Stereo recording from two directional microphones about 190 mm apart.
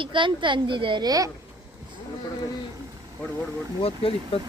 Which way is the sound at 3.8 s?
30° left (ahead or behind).